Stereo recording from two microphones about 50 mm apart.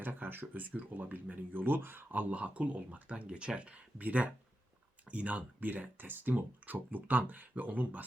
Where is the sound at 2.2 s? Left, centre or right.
Right.